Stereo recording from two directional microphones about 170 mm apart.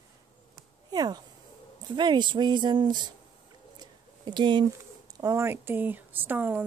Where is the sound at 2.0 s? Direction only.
25° right (ahead or behind).